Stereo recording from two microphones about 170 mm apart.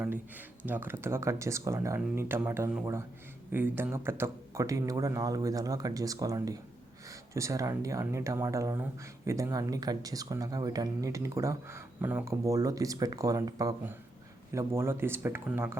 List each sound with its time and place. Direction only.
0.6 s speech: 10° right (ahead or behind)